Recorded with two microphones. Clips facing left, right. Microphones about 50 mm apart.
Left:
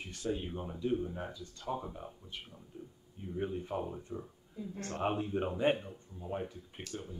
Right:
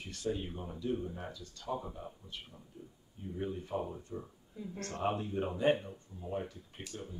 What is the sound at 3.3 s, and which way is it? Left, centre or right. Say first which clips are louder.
Speech: left 1 dB; left.